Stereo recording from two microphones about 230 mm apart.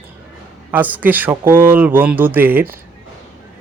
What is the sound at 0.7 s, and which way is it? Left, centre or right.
Speech, centre.